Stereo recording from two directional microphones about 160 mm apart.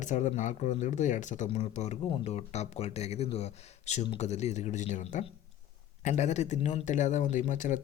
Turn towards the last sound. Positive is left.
turn(degrees=50)  # may be behind; listen again after turning